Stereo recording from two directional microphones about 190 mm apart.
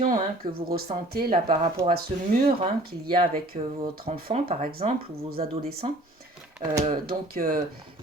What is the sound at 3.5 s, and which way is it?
Speech, 45° right (ahead or behind).